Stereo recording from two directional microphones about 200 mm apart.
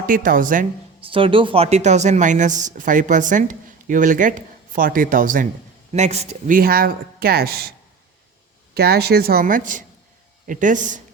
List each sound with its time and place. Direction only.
0.0 s speech: 45° right (ahead or behind)
1.0 s a woman's voice: 25° right (ahead or behind); by 7.7 s 50° right (ahead or behind)
8.7 s a woman's voice: 50° right (ahead or behind)